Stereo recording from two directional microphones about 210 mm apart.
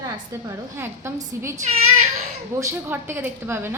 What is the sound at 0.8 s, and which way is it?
A woman's voice, 10° right (ahead or behind).